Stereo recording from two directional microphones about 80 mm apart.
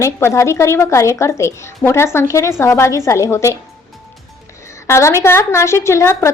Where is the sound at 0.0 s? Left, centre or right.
Left.